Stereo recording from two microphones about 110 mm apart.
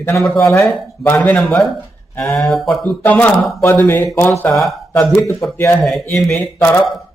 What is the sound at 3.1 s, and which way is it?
Speech, 15° left (ahead or behind).